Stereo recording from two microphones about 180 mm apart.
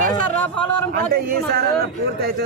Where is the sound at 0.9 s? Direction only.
55° right (ahead or behind).